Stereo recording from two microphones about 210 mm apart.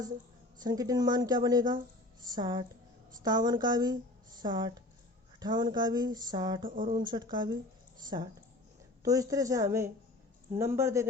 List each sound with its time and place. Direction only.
0.6 s a woman's voice: 20° right (ahead or behind)